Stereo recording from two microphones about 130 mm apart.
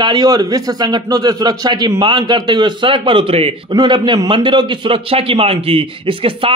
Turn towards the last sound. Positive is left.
turn(degrees=-45)  # may be behind; listen again after turning